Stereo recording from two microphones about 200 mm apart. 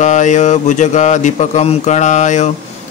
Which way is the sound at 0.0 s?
35° left (ahead or behind).